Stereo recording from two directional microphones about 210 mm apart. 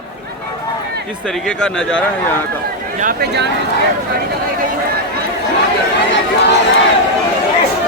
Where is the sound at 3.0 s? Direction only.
45° right (ahead or behind).